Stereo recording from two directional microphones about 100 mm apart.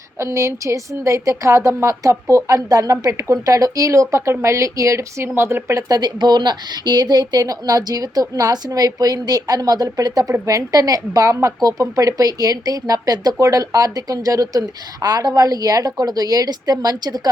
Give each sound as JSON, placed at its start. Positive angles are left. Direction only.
{"t": 0.2, "sound": "a woman's voice", "side_deg": -30}
{"t": 6.0, "sound": "a woman's voice", "side_deg": -45}